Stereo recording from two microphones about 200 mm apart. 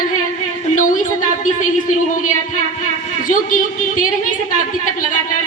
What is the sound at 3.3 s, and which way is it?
Speech, 40° left (ahead or behind).